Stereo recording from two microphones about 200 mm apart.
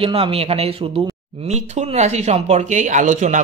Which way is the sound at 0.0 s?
30° right (ahead or behind).